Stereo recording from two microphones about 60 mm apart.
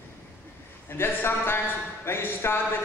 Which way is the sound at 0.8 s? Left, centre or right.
Left.